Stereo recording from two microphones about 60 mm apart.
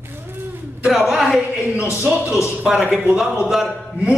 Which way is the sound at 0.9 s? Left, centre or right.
Centre.